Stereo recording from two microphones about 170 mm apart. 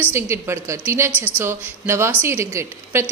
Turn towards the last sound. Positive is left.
turn(degrees=-15)  # may be behind; listen again after turning